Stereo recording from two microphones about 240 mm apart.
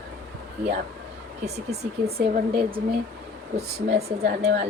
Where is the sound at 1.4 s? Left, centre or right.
Right.